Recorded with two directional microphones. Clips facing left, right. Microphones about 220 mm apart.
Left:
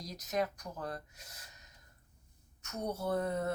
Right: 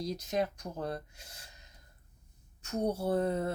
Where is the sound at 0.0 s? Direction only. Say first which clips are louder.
Right 3 dB; 30° right (ahead or behind).